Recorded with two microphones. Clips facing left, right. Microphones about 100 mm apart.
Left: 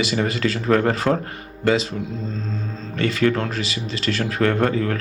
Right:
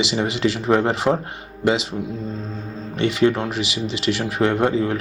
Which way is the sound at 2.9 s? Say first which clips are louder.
Right 2 dB; 20° right (ahead or behind).